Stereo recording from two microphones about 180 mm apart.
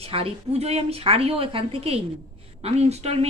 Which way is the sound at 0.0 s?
35° right (ahead or behind).